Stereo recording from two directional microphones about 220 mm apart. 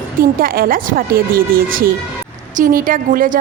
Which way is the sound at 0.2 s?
40° right (ahead or behind).